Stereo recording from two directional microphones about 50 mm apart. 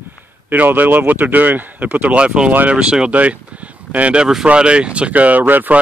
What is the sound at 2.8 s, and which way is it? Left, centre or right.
Speech, right.